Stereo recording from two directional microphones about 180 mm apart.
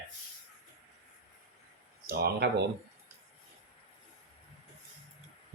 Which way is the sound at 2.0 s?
65° right (ahead or behind).